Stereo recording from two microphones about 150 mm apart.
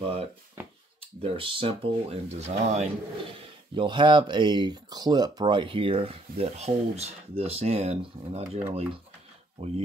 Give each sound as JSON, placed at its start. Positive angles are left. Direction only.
{"t": 0.0, "sound": "speech", "side_deg": -40}
{"t": 3.7, "sound": "speech", "side_deg": -30}